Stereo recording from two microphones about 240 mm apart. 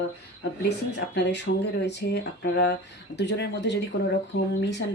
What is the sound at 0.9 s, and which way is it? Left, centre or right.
Speech, left.